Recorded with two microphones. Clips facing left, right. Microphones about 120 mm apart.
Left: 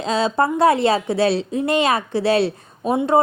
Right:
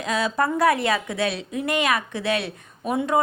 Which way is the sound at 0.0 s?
30° left (ahead or behind).